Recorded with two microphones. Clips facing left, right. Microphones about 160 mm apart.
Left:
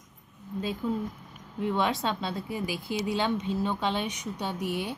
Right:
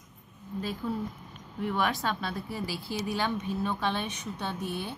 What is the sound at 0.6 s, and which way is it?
A woman's voice, 20° left (ahead or behind).